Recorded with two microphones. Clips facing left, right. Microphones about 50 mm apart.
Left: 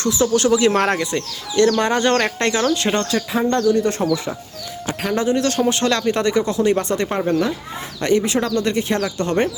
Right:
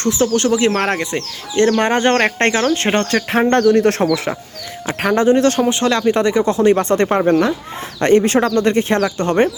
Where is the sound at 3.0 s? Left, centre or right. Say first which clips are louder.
Right 4 dB; right.